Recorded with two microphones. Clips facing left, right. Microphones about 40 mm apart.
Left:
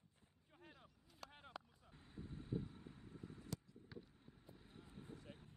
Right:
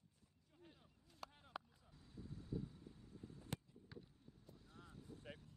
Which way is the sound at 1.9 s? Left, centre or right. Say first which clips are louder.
Left 2 dB; left.